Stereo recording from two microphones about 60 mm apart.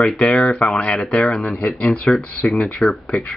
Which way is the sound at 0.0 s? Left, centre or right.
Centre.